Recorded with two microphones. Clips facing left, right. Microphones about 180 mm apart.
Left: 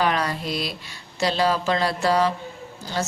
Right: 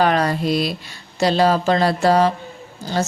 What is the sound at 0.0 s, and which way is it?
Speech, 45° right (ahead or behind).